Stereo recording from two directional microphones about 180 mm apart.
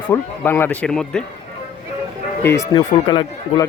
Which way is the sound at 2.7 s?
25° left (ahead or behind).